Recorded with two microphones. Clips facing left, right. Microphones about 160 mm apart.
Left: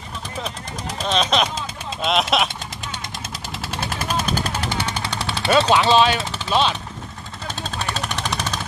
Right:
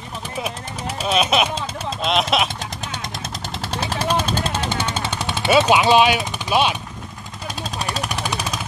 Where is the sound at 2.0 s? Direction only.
Centre (ahead or behind).